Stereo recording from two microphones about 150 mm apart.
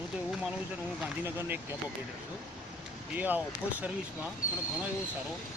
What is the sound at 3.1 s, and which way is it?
Speech, 10° right (ahead or behind).